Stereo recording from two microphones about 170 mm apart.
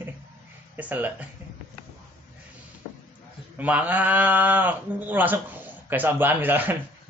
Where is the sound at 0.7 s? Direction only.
10° right (ahead or behind).